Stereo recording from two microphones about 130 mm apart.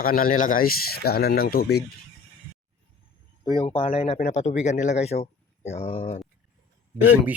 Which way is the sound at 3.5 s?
40° left (ahead or behind).